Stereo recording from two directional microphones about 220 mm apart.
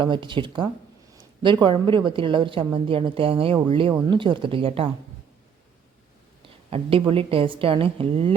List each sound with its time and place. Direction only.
0.0 s a woman's voice: 20° right (ahead or behind)
6.7 s a woman's voice: 25° right (ahead or behind)